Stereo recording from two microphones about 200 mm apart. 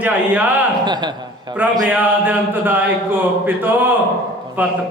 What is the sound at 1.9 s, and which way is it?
Speech, 10° right (ahead or behind).